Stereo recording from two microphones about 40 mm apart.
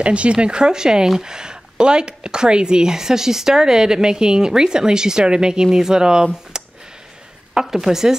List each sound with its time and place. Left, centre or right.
0.0 s speech: right
6.5 s a sound: centre
7.6 s speech: centre